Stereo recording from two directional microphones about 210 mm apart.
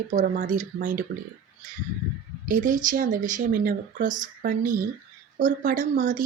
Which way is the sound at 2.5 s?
40° right (ahead or behind).